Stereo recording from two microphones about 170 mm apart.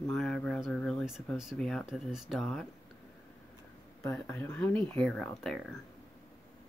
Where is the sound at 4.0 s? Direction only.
15° left (ahead or behind).